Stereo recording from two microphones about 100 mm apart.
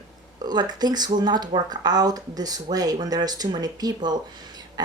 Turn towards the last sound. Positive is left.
turn(degrees=-45)  # may be behind; listen again after turning